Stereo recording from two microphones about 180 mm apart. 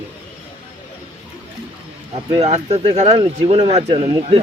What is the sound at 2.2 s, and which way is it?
Speech, 30° right (ahead or behind).